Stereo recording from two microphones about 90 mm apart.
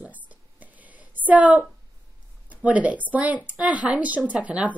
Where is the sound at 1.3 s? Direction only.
15° right (ahead or behind).